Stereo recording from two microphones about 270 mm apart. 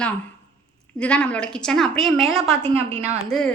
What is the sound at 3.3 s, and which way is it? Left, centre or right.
Speech, centre.